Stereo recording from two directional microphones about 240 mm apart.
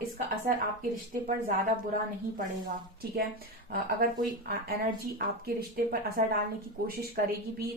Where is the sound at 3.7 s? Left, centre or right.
Right.